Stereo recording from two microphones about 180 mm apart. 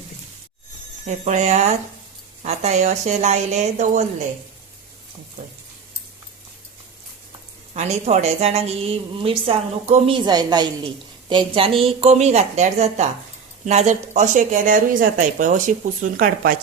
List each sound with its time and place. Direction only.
1.0 s a woman's voice: 40° right (ahead or behind)
7.7 s a woman's voice: 40° right (ahead or behind)